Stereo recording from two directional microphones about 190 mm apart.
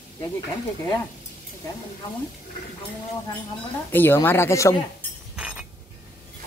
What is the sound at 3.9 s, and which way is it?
Speech, 10° left (ahead or behind).